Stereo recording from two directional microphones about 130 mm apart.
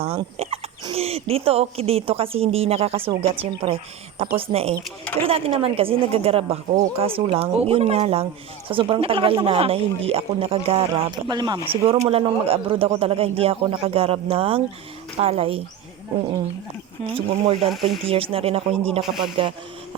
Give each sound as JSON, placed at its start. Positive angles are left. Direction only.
{"t": 0.3, "sound": "speech", "side_deg": -50}
{"t": 11.3, "sound": "speech", "side_deg": -30}
{"t": 12.0, "sound": "speech", "side_deg": -45}
{"t": 17.1, "sound": "speech", "side_deg": -45}
{"t": 17.7, "sound": "speech", "side_deg": 0}
{"t": 18.0, "sound": "speech", "side_deg": -45}